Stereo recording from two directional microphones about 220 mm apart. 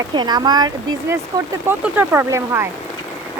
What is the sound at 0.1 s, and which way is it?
Speech, 20° right (ahead or behind).